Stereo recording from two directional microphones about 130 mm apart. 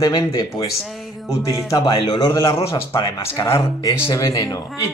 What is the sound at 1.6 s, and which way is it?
Speech, 35° left (ahead or behind).